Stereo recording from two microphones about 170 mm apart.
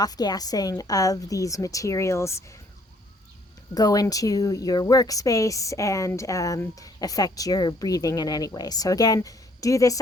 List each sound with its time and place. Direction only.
0.0 s speech: 25° left (ahead or behind)
3.8 s speech: 20° left (ahead or behind)